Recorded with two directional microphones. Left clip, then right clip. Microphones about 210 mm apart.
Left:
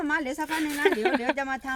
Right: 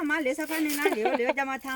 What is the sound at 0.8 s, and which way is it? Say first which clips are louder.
Speech: left 3 dB; 25° left (ahead or behind).